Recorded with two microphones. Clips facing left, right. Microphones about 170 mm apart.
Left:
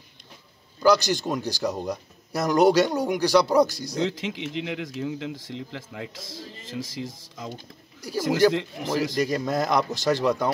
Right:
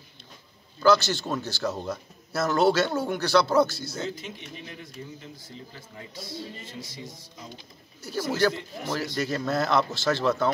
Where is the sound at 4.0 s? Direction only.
90° left.